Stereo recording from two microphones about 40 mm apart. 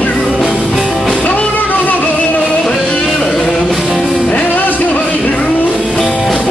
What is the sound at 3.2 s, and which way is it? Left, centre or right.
Music, left.